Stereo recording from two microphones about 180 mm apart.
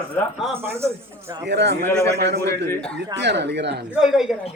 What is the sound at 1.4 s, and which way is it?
Speech, 70° right (ahead or behind).